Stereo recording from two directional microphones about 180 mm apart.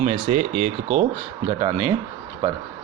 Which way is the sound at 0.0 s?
40° right (ahead or behind).